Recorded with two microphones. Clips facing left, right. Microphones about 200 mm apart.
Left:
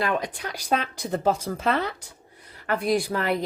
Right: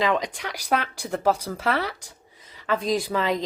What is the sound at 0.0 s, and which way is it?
Speech, 90° right.